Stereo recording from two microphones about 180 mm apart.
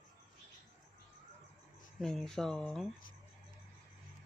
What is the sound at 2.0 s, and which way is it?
Speech, centre (ahead or behind).